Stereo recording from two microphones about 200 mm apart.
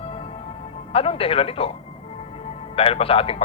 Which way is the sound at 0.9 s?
30° left (ahead or behind).